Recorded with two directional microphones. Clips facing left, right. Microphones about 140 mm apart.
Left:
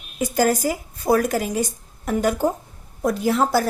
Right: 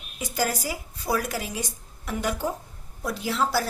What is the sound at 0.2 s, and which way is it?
A woman's voice, 50° left (ahead or behind).